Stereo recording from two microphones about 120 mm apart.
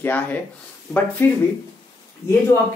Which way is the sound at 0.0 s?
15° left (ahead or behind).